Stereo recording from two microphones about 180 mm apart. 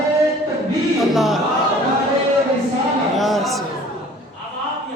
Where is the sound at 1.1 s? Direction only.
Centre (ahead or behind).